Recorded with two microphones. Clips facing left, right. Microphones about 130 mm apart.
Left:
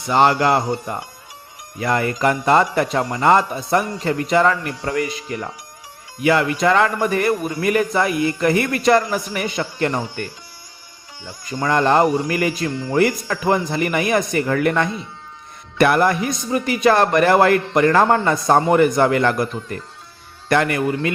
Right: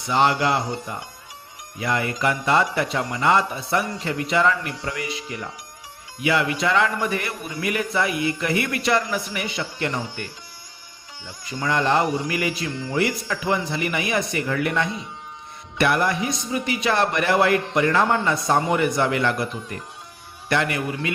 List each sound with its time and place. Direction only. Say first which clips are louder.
0.1 s speech: left 4 dB; 50° left (ahead or behind)
11.3 s speech: left 5 dB; 45° left (ahead or behind)
20.5 s speech: left 5 dB; 50° left (ahead or behind)